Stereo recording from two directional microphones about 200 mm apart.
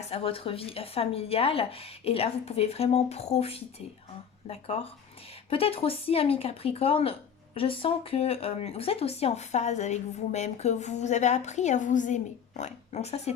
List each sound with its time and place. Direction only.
0.0 s speech: 30° left (ahead or behind)